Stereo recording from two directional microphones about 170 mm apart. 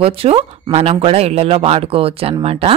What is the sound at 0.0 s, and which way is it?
Speech, 35° right (ahead or behind).